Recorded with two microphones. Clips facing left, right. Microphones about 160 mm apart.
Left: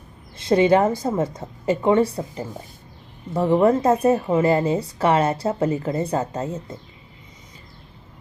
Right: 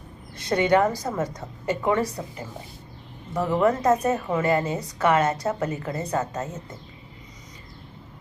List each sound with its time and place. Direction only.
0.3 s a woman's voice: 25° left (ahead or behind)